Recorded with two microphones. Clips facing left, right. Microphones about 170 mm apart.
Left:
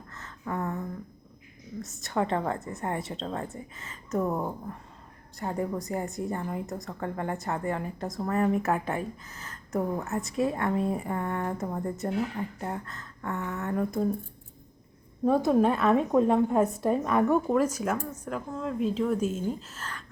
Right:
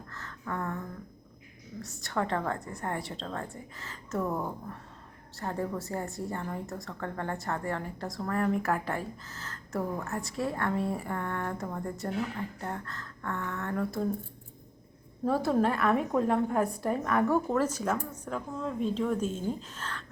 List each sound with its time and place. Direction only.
0.1 s a sound: 20° left (ahead or behind)
1.8 s a woman's voice: 20° left (ahead or behind)
15.2 s a woman's voice: 20° left (ahead or behind)